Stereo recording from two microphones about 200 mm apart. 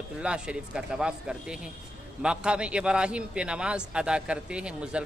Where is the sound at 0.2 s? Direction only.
5° right (ahead or behind).